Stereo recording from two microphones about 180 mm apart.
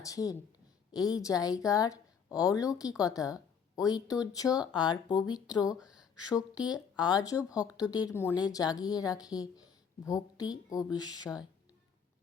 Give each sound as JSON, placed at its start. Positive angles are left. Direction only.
{"t": 0.0, "sound": "a woman's voice", "side_deg": 20}